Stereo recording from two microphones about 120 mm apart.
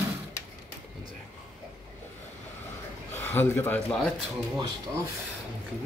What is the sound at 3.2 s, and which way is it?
Speech, 15° left (ahead or behind).